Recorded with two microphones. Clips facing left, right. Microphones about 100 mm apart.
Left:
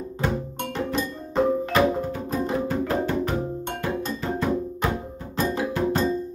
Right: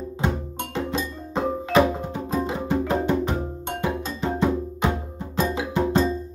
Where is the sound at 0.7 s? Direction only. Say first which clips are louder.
Even; 20° right (ahead or behind).